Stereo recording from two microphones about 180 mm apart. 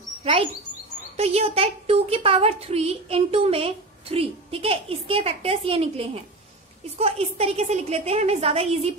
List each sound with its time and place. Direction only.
0.2 s a woman's voice: 30° right (ahead or behind)